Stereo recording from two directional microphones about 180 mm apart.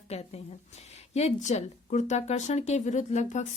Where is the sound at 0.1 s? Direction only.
35° left (ahead or behind).